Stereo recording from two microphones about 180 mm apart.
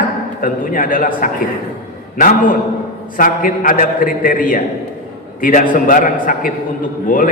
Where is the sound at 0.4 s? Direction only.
50° left (ahead or behind).